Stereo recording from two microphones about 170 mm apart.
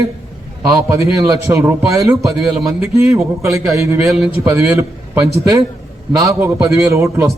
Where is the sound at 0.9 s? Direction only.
15° right (ahead or behind).